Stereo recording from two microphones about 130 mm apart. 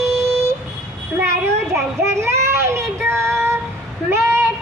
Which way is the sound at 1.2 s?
20° right (ahead or behind).